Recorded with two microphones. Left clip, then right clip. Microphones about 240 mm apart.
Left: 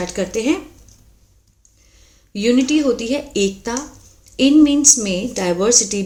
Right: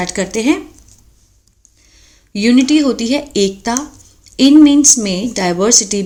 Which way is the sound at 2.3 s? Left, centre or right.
Right.